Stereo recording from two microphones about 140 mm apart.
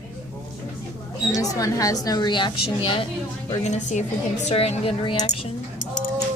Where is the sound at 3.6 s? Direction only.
55° left (ahead or behind); by 5.5 s 35° left (ahead or behind).